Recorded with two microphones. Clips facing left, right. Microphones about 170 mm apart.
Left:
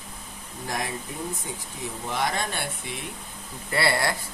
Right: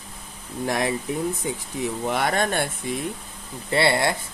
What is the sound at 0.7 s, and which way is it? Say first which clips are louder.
Speech: right 7 dB; 75° right (ahead or behind).